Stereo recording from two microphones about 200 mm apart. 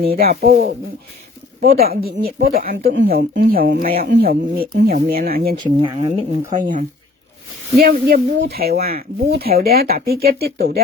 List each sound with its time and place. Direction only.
0.0 s speech: 50° right (ahead or behind)
5.5 s speech: 25° right (ahead or behind)
6.5 s speech: 40° right (ahead or behind)